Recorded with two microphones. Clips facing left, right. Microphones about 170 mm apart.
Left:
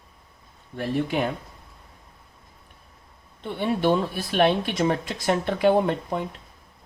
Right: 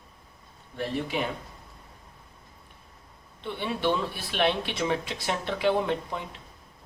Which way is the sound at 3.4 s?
45° left (ahead or behind).